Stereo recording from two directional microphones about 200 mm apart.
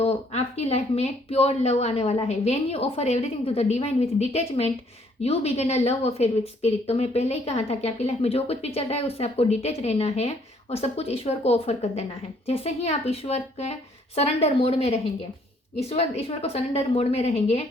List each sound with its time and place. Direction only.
0.0 s speech: 30° left (ahead or behind)